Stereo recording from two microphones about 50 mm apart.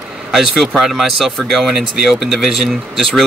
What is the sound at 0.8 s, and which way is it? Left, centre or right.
Speech, centre.